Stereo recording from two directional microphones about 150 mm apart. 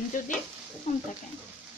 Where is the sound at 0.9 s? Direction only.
50° left (ahead or behind).